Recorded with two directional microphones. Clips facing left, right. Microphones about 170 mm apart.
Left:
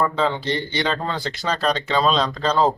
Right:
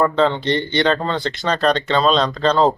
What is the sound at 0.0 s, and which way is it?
A man's voice, 5° left (ahead or behind).